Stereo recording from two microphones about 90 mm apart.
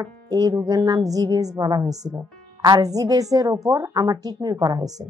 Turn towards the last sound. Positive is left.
turn(degrees=-45)  # may be behind; listen again after turning